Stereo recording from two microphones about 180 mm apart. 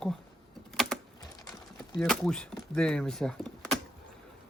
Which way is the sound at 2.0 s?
5° left (ahead or behind).